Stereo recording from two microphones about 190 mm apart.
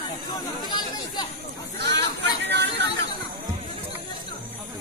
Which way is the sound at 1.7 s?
60° right (ahead or behind).